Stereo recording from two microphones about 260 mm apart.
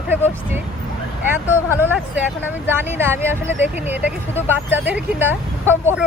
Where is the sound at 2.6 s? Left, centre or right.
Centre.